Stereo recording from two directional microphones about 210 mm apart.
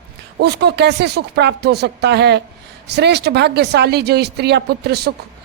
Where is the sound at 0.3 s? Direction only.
50° right (ahead or behind).